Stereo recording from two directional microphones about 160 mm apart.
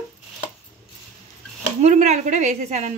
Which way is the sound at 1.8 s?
45° right (ahead or behind).